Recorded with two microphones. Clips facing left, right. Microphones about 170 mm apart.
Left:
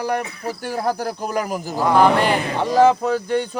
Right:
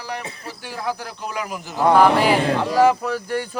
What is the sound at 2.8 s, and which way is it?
Speech, 25° left (ahead or behind).